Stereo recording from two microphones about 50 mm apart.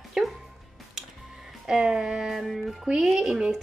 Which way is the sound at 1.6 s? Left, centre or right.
Centre.